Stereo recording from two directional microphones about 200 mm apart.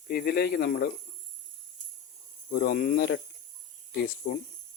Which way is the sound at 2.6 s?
45° left (ahead or behind).